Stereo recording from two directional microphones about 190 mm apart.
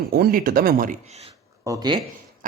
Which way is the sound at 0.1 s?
50° right (ahead or behind).